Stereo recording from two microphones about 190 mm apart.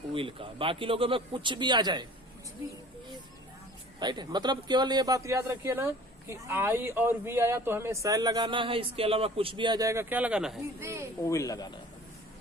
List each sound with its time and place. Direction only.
0.1 s speech: 30° right (ahead or behind)
4.0 s speech: 20° right (ahead or behind); by 10.6 s 5° right (ahead or behind)
10.8 s speech: 15° right (ahead or behind)
11.2 s speech: 15° left (ahead or behind)